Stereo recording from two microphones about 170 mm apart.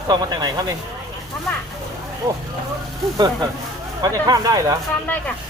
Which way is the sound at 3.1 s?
25° right (ahead or behind).